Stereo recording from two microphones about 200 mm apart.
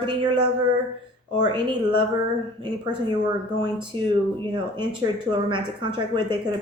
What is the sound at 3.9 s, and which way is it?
A woman's voice, 25° right (ahead or behind).